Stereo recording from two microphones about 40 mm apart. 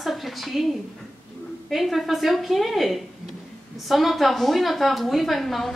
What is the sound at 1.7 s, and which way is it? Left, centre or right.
Speech, centre.